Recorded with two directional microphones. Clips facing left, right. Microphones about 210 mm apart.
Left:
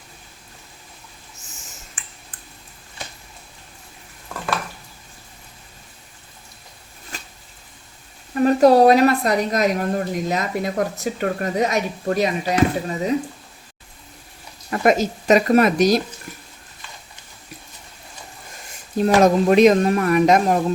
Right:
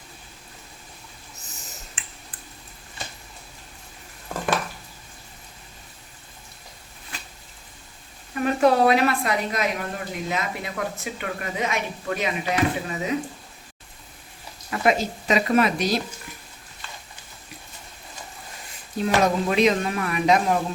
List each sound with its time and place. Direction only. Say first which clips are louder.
8.4 s a woman's voice: left 6 dB; 40° left (ahead or behind)
14.7 s speech: left 4 dB; 45° left (ahead or behind)
19.0 s speech: left 7 dB; 45° left (ahead or behind)